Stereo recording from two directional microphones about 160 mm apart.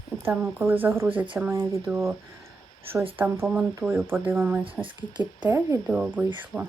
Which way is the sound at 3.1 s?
15° right (ahead or behind).